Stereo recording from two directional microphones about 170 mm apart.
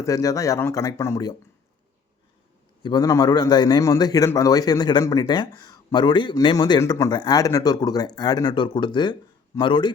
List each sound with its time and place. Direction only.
0.0 s a man's voice: 20° left (ahead or behind)
2.8 s a man's voice: 20° left (ahead or behind)